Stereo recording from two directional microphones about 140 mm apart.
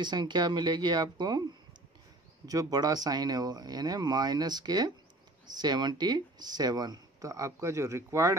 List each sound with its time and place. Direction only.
0.0 s speech: 30° right (ahead or behind)
2.4 s speech: 25° right (ahead or behind)